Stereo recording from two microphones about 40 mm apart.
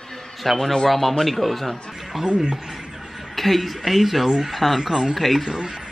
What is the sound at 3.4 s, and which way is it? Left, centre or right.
A woman's voice, centre.